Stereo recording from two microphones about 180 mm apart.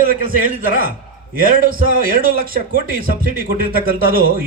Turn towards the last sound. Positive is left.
turn(degrees=-55)  # may be behind; listen again after turning